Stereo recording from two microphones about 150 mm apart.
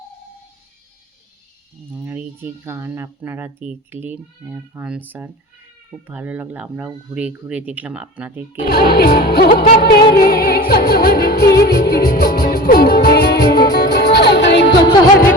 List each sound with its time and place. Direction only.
1.9 s speech: 10° right (ahead or behind)
8.7 s music: 90° left